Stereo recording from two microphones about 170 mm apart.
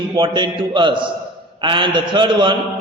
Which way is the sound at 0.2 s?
30° right (ahead or behind).